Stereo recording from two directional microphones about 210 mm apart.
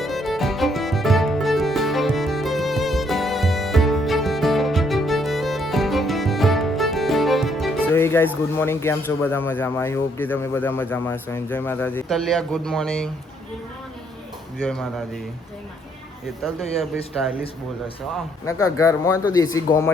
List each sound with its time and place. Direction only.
0.0 s music: centre (ahead or behind)
7.9 s music: 10° left (ahead or behind)
8.5 s speech: 10° left (ahead or behind)
14.6 s a man's voice: 5° left (ahead or behind)
16.2 s a man's voice: centre (ahead or behind)
18.4 s speech: 15° left (ahead or behind)